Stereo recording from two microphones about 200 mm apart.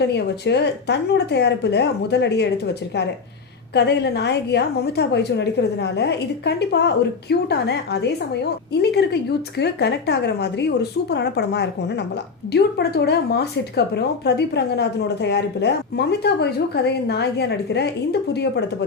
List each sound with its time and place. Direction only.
0.0 s speech: 55° left (ahead or behind)
3.8 s speech: 55° left (ahead or behind)